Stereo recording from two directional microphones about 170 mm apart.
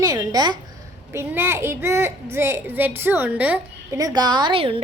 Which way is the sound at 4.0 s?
25° right (ahead or behind).